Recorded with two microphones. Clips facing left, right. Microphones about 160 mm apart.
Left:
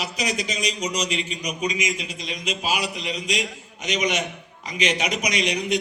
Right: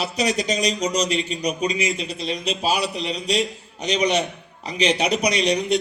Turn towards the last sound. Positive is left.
turn(degrees=-35)  # may be behind; listen again after turning